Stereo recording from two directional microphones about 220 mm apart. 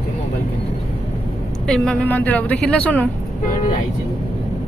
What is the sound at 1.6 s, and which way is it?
A woman's voice, centre (ahead or behind).